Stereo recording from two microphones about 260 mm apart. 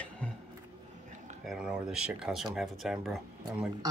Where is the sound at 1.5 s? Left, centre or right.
Centre.